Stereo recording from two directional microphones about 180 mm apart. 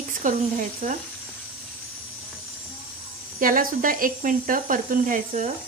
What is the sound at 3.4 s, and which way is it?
Speech, 50° right (ahead or behind).